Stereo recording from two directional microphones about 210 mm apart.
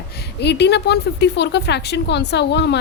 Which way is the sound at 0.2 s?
55° left (ahead or behind).